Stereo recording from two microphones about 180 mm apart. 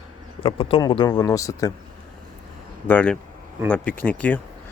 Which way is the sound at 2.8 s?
10° left (ahead or behind).